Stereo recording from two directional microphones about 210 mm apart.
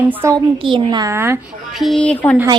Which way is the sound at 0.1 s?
15° right (ahead or behind).